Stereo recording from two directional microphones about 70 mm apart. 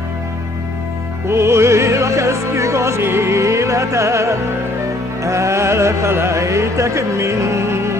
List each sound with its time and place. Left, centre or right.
1.3 s music: right